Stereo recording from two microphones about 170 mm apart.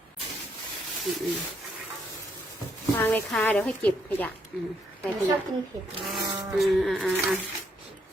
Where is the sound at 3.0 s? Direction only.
10° left (ahead or behind).